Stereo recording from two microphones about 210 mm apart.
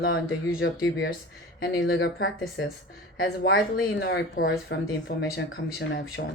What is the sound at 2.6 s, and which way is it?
Speech, 60° left (ahead or behind).